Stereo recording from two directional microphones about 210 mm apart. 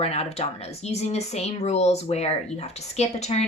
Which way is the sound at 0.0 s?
30° left (ahead or behind).